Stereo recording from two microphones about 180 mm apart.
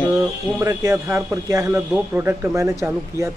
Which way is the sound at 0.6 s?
15° right (ahead or behind).